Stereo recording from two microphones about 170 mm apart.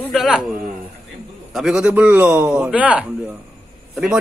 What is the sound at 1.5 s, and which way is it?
A man's voice, 5° right (ahead or behind).